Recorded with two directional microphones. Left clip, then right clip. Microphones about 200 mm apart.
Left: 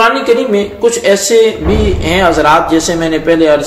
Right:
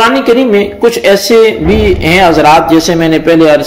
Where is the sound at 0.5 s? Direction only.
40° right (ahead or behind).